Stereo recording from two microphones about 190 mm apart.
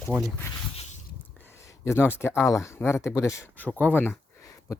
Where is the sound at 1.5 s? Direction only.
15° left (ahead or behind).